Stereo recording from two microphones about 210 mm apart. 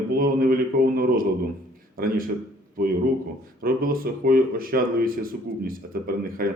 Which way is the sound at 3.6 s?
45° right (ahead or behind).